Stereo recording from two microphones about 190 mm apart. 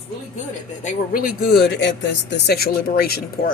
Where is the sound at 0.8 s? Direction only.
40° left (ahead or behind).